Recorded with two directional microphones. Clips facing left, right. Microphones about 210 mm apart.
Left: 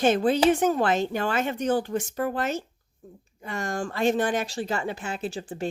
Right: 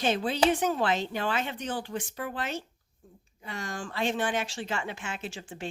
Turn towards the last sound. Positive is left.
turn(degrees=40)  # may be behind; listen again after turning